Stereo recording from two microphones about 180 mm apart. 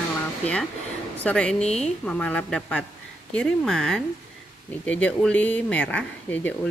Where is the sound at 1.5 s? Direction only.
35° left (ahead or behind).